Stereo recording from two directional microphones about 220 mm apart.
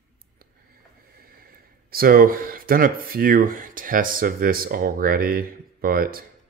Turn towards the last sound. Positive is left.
turn(degrees=-40)  # may be behind; listen again after turning